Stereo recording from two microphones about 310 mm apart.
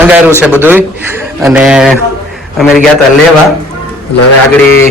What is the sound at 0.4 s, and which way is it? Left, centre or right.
A man's voice, centre.